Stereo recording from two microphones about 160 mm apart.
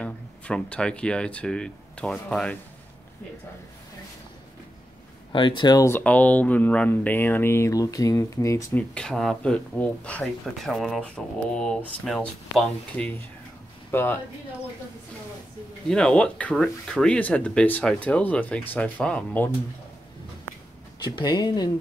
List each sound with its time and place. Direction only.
0.0 s speech: 5° left (ahead or behind)
5.3 s speech: 30° left (ahead or behind)
5.9 s speech: 10° left (ahead or behind)
8.9 s speech: 5° left (ahead or behind)
15.9 s speech: 5° left (ahead or behind)
21.0 s speech: 30° left (ahead or behind)